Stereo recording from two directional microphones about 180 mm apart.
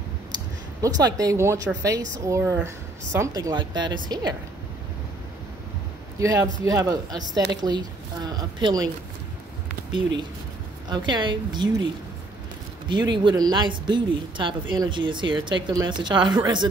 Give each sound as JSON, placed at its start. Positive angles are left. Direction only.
{"t": 0.8, "sound": "speech", "side_deg": -20}
{"t": 6.1, "sound": "speech", "side_deg": -20}
{"t": 10.9, "sound": "speech", "side_deg": -25}
{"t": 13.1, "sound": "speech", "side_deg": -25}